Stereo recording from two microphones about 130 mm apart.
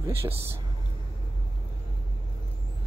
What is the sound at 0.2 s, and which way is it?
Speech, 20° right (ahead or behind).